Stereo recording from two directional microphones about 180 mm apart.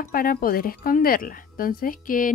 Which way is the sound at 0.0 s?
55° left (ahead or behind).